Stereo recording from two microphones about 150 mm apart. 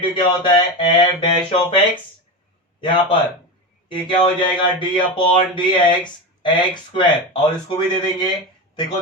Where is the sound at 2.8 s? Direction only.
35° left (ahead or behind).